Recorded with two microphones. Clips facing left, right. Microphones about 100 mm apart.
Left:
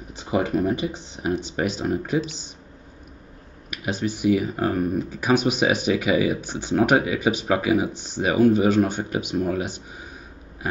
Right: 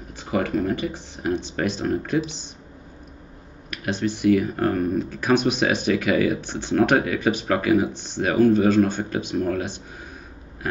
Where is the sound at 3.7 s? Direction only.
10° left (ahead or behind).